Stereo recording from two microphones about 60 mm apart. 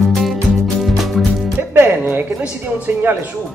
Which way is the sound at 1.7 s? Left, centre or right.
Right.